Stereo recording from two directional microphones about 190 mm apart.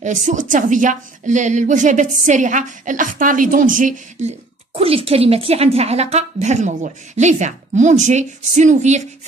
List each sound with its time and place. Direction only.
0.0 s a woman's voice: 40° right (ahead or behind)